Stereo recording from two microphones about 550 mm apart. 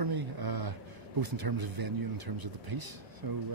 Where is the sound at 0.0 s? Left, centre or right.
Right.